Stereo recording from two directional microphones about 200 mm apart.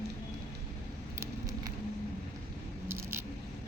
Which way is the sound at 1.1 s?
15° right (ahead or behind).